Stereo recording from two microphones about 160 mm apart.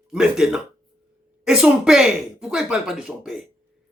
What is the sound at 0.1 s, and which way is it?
Speech, 5° right (ahead or behind).